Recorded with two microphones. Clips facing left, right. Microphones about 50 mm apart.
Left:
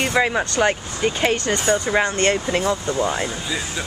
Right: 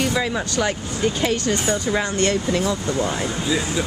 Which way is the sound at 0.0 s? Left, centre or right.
Left.